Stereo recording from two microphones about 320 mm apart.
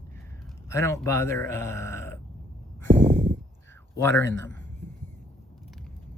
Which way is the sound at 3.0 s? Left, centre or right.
Right.